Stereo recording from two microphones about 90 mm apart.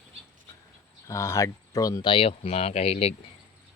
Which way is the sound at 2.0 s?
70° left (ahead or behind).